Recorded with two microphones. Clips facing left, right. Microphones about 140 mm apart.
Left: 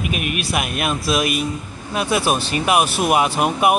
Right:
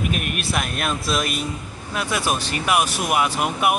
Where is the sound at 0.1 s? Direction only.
5° left (ahead or behind).